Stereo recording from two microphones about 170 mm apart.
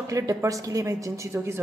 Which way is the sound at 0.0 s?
20° right (ahead or behind).